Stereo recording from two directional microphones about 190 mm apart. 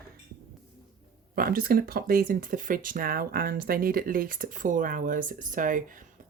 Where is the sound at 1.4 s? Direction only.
50° right (ahead or behind).